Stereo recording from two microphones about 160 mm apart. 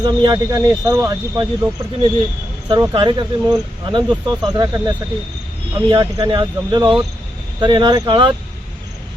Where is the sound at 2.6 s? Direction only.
25° right (ahead or behind).